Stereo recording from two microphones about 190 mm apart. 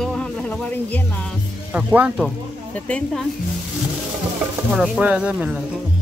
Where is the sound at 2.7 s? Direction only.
5° left (ahead or behind).